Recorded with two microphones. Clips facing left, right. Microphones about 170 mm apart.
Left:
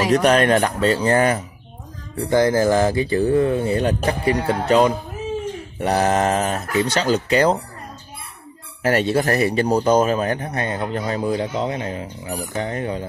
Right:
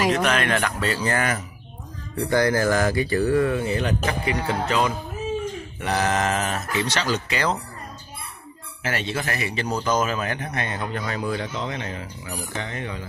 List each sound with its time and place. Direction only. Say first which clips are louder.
0.1 s speech: left 7 dB; 40° left (ahead or behind)
2.2 s speech: left 4 dB; 15° left (ahead or behind); by 7.6 s 30° left (ahead or behind)
8.8 s speech: left 9 dB; 40° left (ahead or behind)